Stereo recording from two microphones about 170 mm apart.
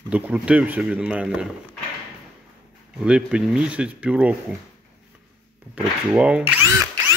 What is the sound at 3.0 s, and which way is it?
Speech, 5° right (ahead or behind).